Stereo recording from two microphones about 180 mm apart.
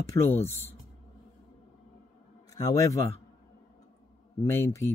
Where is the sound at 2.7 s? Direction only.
20° left (ahead or behind).